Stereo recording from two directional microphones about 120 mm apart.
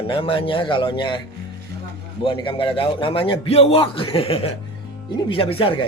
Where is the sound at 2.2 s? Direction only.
45° left (ahead or behind).